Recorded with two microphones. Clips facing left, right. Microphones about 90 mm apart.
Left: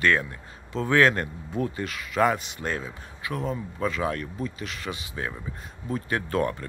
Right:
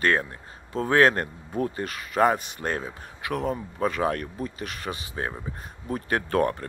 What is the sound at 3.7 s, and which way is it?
Speech, 45° right (ahead or behind).